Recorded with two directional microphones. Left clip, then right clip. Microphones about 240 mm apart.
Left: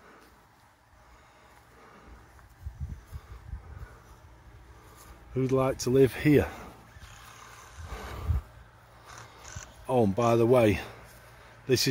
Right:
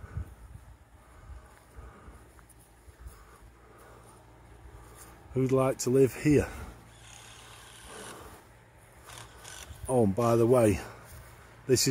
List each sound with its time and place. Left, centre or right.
5.3 s speech: centre
9.8 s speech: centre